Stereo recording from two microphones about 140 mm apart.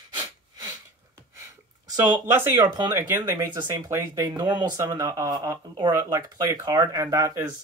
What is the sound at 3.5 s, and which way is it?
Speech, 30° right (ahead or behind).